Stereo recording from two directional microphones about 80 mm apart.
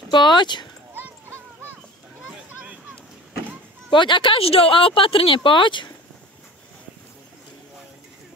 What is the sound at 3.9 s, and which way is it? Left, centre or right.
Speech, left.